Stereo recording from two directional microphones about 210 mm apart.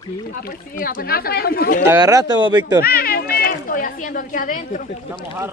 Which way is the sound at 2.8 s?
45° left (ahead or behind).